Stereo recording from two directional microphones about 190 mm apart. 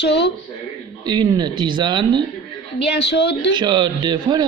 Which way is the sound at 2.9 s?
65° left (ahead or behind).